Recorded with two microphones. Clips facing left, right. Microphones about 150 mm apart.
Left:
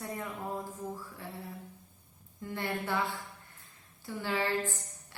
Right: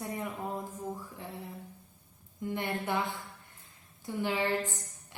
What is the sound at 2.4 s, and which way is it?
A woman's voice, 20° right (ahead or behind).